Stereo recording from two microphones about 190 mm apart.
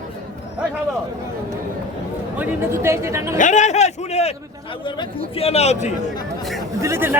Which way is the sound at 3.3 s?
40° left (ahead or behind).